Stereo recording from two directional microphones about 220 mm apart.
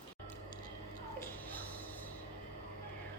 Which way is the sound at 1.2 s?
10° left (ahead or behind).